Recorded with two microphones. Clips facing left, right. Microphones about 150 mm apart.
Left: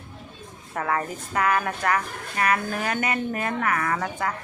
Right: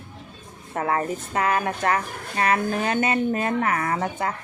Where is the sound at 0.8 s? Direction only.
25° right (ahead or behind).